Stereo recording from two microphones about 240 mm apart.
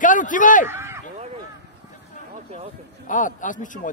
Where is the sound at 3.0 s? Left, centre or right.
Left.